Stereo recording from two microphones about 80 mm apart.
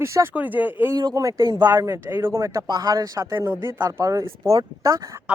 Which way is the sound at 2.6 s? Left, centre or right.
Right.